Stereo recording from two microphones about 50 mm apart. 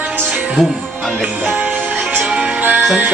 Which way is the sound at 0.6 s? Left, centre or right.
Centre.